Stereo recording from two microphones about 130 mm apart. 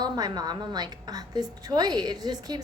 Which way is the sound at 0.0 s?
30° right (ahead or behind).